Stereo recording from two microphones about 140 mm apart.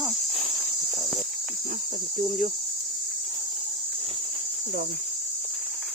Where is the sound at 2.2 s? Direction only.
85° right.